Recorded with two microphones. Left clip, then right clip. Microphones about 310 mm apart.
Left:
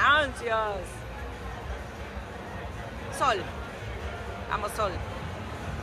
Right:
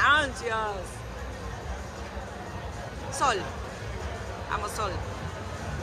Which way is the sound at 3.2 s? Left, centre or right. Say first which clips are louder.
Even; centre.